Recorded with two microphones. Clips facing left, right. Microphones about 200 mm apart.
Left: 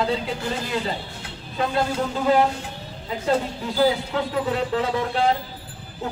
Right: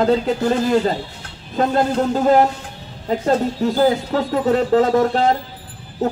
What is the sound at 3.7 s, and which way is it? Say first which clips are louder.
A man's voice: right 2 dB; 45° right (ahead or behind).